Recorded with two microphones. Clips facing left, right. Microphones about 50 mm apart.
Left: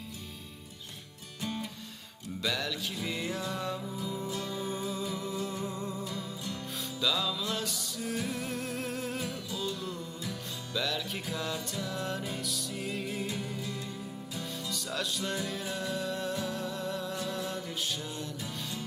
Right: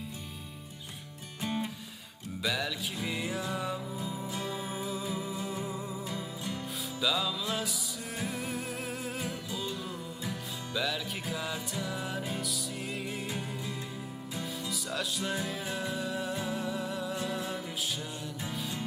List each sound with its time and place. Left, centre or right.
1.4 s music: right
2.4 s music: centre
4.3 s music: centre
4.5 s music: centre